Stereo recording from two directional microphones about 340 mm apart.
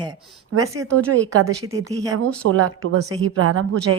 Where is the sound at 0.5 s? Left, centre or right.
Right.